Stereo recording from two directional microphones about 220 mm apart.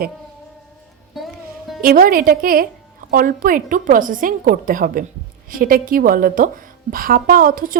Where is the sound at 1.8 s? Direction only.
40° right (ahead or behind).